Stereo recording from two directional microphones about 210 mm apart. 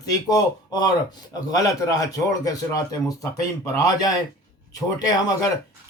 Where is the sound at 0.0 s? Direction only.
20° left (ahead or behind).